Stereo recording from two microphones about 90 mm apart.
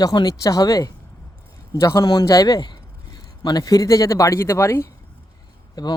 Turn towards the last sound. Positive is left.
turn(degrees=50)  # may be behind; listen again after turning